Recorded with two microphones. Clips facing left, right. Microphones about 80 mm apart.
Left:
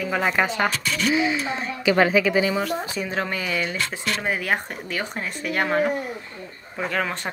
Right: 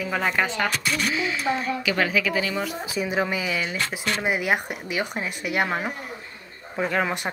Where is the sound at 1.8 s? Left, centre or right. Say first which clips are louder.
Left 9 dB; left.